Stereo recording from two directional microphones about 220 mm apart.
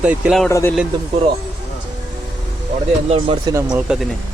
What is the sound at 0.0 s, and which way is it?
Speech, 5° right (ahead or behind).